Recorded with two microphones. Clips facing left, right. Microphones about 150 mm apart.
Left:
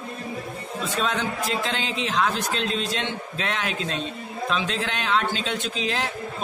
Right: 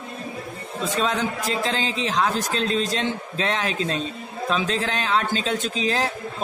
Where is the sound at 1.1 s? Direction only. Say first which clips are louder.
Right 1 dB; 35° right (ahead or behind).